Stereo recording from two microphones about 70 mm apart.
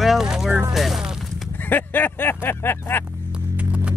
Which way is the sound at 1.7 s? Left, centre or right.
Left.